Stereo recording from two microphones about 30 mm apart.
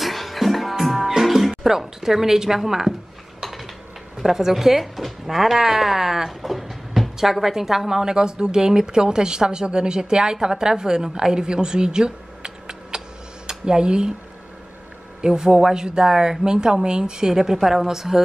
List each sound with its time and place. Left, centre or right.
0.0 s music: centre
0.9 s music: centre
1.2 s music: centre
2.0 s speech: centre
4.2 s a woman's voice: centre; by 14.1 s right
15.2 s a woman's voice: right
17.6 s a woman's voice: centre